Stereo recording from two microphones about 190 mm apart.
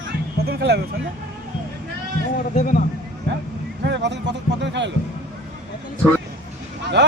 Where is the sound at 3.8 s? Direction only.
65° right (ahead or behind).